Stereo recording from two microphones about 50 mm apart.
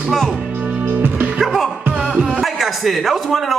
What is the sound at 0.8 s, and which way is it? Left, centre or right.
Music, right.